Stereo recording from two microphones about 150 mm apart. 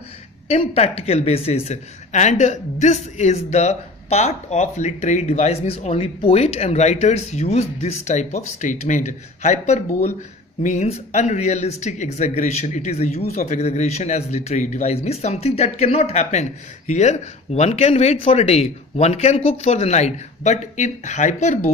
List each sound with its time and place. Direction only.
0.5 s speech: 45° left (ahead or behind)